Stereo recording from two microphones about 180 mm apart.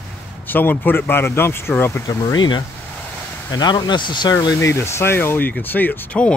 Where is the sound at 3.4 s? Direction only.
25° left (ahead or behind); by 6.3 s 5° left (ahead or behind).